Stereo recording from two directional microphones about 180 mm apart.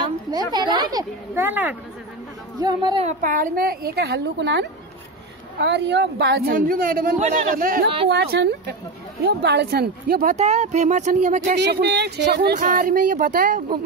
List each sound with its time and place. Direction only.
0.3 s a woman's voice: 20° right (ahead or behind)
2.6 s a woman's voice: 25° right (ahead or behind)
3.1 s a woman's voice: 45° right (ahead or behind)
7.2 s speech: 40° right (ahead or behind)
8.1 s a woman's voice: 70° right (ahead or behind)
10.3 s speech: 35° right (ahead or behind)
11.5 s speech: 65° right (ahead or behind)
12.5 s speech: 45° right (ahead or behind)